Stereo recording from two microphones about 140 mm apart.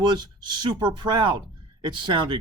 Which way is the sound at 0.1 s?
30° right (ahead or behind).